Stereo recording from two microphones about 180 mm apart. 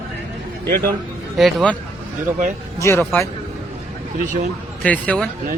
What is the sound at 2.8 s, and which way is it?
Speech, 15° left (ahead or behind).